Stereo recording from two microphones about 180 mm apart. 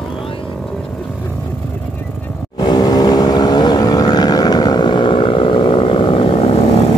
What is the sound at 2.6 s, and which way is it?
Vehicle, 20° left (ahead or behind).